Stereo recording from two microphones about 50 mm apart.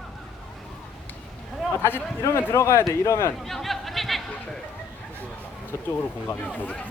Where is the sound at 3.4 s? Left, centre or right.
Centre.